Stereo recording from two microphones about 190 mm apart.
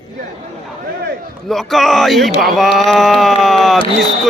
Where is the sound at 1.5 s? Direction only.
Centre (ahead or behind).